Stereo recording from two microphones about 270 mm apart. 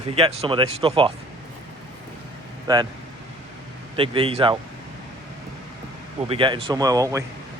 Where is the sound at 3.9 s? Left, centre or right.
Centre.